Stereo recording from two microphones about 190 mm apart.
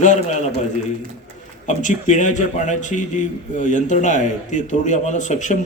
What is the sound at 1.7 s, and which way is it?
A man's voice, 40° left (ahead or behind).